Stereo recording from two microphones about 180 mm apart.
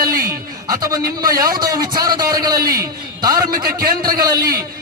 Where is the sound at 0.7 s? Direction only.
20° right (ahead or behind).